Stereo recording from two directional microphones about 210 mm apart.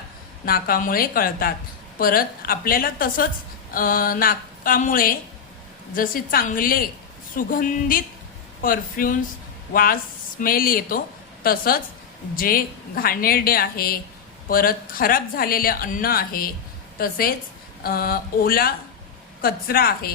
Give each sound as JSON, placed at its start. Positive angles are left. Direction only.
{"t": 0.4, "sound": "a woman's voice", "side_deg": 45}